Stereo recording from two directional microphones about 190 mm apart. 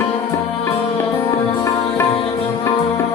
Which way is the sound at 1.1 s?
15° left (ahead or behind).